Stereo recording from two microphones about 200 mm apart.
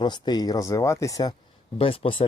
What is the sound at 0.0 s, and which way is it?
Speech, 20° left (ahead or behind).